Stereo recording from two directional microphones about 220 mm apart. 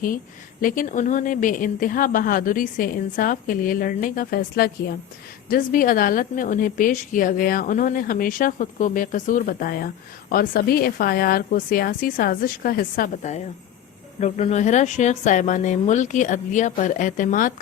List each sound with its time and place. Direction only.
0.6 s a woman's voice: 35° left (ahead or behind)